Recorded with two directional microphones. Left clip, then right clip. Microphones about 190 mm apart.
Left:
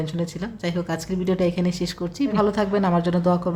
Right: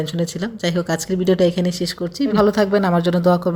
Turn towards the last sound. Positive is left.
turn(degrees=-20)  # may be behind; listen again after turning